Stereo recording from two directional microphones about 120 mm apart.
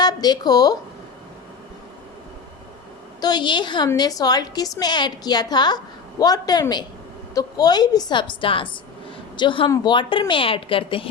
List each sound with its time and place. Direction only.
0.0 s speech: 35° left (ahead or behind)
3.2 s a woman's voice: 35° left (ahead or behind)
9.6 s a woman's voice: 35° left (ahead or behind)